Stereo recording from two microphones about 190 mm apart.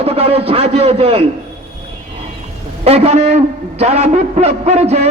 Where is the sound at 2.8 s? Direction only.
30° right (ahead or behind).